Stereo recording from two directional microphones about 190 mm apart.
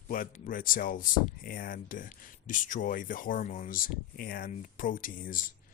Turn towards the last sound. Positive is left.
turn(degrees=45)  # may be behind; listen again after turning